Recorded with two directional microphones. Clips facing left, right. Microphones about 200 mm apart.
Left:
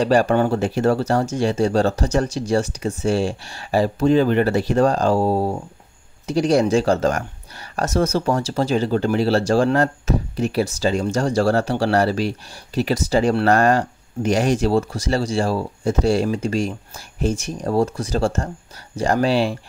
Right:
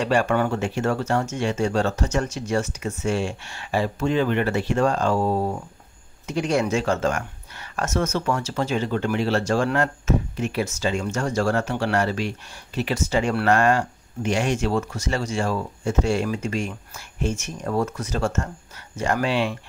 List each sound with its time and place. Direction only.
0.0 s speech: 35° left (ahead or behind)